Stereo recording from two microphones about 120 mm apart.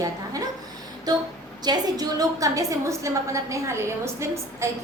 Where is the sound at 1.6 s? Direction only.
35° right (ahead or behind).